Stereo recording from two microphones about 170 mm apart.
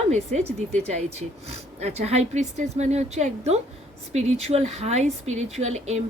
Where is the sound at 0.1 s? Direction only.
40° right (ahead or behind).